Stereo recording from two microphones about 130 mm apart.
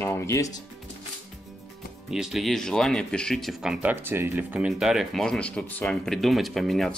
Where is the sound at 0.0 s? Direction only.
20° left (ahead or behind).